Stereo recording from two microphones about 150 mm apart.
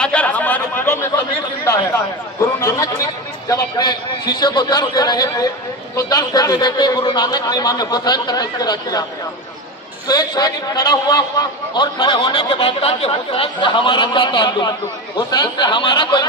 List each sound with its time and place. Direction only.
0.0 s chatter: 10° left (ahead or behind)
2.4 s speech: 20° left (ahead or behind)
10.1 s a man's voice: 25° left (ahead or behind)